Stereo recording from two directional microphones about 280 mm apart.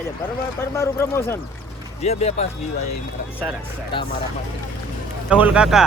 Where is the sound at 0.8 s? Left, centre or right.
Centre.